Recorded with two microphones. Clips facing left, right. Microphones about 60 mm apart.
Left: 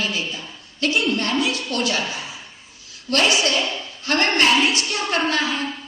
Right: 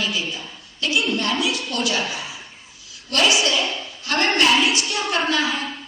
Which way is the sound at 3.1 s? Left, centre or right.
Left.